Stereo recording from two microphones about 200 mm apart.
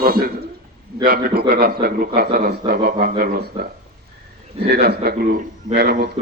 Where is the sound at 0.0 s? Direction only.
50° right (ahead or behind).